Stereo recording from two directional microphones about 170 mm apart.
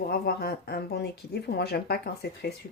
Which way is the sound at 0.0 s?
70° left (ahead or behind).